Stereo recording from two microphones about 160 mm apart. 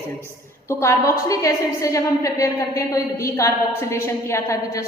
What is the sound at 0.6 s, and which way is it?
A woman's voice, 15° left (ahead or behind).